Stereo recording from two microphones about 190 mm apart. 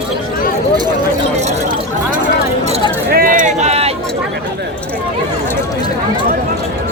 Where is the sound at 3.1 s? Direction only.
50° right (ahead or behind); by 3.9 s 35° right (ahead or behind).